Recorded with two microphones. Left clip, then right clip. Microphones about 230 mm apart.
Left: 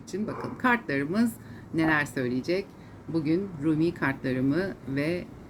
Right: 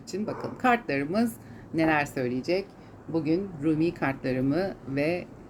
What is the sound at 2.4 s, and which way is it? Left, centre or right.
Speech, right.